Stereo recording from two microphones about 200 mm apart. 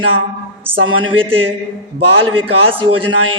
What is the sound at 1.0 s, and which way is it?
A woman's voice, 25° right (ahead or behind).